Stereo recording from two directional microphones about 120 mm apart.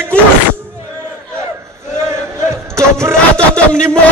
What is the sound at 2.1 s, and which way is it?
Chant, 25° right (ahead or behind).